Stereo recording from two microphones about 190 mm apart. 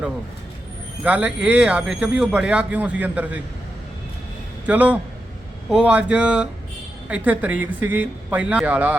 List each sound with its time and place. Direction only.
1.0 s speech: 5° right (ahead or behind)
4.6 s speech: 5° right (ahead or behind)